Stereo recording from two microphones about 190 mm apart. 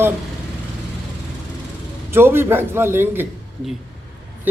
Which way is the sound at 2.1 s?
10° right (ahead or behind).